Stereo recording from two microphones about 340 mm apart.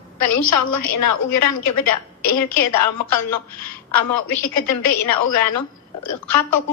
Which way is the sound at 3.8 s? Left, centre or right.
Left.